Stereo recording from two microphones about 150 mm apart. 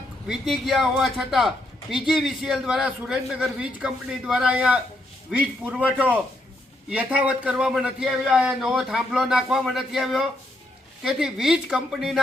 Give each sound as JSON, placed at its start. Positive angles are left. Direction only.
{"t": 0.3, "sound": "a man's voice", "side_deg": 0}